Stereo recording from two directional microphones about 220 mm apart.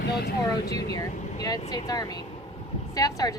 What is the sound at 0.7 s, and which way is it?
Speech, 15° left (ahead or behind).